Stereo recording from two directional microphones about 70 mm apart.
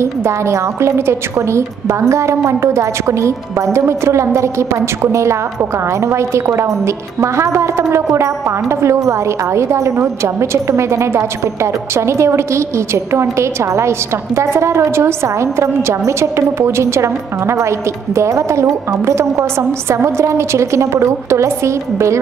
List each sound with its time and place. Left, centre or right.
0.0 s a woman's voice: right